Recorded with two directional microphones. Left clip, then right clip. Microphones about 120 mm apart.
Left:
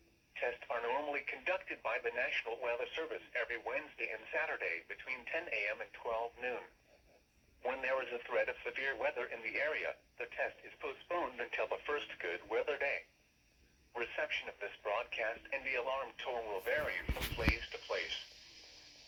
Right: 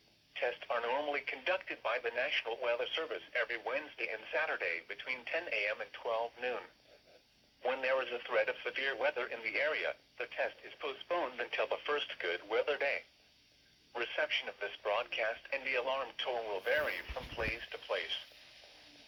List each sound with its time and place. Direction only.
0.3 s speech: 30° right (ahead or behind)